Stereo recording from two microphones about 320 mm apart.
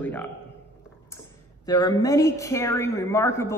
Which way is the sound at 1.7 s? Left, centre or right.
Centre.